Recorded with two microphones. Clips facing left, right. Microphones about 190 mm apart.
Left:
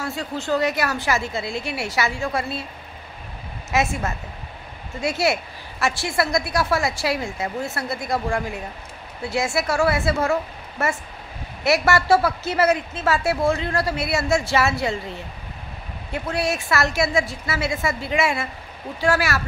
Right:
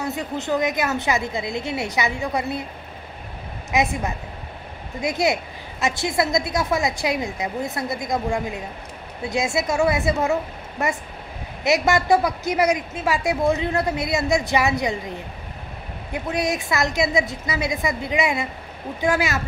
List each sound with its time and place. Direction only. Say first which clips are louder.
0.0 s a woman's voice: right 1 dB; 20° right (ahead or behind)
3.7 s a woman's voice: right 1 dB; 15° right (ahead or behind)